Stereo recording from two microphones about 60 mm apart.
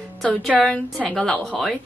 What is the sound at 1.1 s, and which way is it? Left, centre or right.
Speech, centre.